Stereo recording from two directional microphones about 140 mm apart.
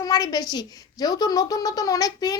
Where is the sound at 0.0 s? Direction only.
25° left (ahead or behind).